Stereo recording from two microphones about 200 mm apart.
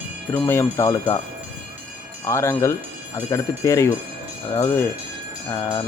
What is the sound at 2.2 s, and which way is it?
Speech, 15° left (ahead or behind).